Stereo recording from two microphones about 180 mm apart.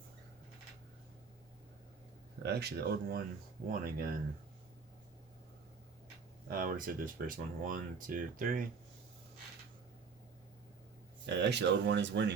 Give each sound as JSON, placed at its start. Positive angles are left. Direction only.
{"t": 2.4, "sound": "speech", "side_deg": -65}
{"t": 6.5, "sound": "speech", "side_deg": -50}
{"t": 11.3, "sound": "speech", "side_deg": -75}